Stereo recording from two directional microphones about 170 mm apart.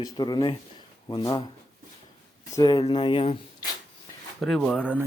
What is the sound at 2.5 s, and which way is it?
Speech, 25° left (ahead or behind).